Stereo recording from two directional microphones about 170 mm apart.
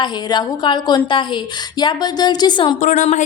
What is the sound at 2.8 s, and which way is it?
Speech, 45° left (ahead or behind).